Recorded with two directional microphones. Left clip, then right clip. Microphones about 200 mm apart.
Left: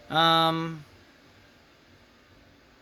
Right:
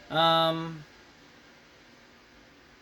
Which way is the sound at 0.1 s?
50° left (ahead or behind).